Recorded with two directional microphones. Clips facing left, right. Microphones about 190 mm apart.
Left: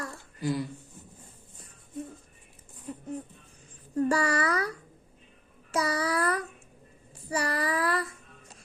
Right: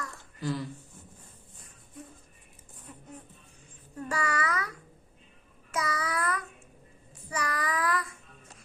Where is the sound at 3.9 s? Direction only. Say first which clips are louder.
Left 7 dB; 35° left (ahead or behind).